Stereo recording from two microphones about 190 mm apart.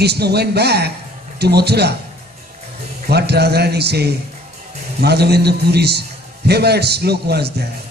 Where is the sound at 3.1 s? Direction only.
60° right (ahead or behind).